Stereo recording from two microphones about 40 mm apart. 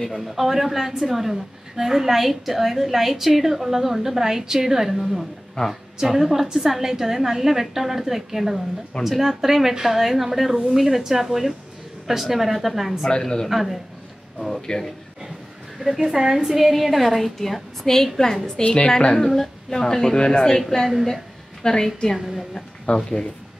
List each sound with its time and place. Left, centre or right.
0.0 s a woman's voice: centre
0.4 s a woman's voice: centre
13.2 s speech: centre
13.5 s a woman's voice: centre
14.4 s a woman's voice: centre
15.8 s a woman's voice: centre
18.6 s a woman's voice: left
19.1 s a woman's voice: centre
21.6 s a woman's voice: centre